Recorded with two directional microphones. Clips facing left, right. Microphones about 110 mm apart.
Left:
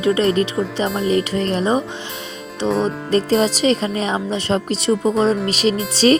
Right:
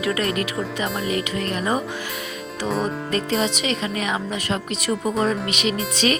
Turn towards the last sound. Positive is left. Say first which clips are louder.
# left 7 dB
turn(degrees=35)  # may be behind; listen again after turning